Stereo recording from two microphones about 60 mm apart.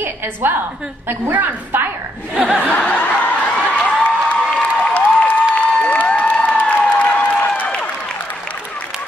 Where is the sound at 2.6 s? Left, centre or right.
Left.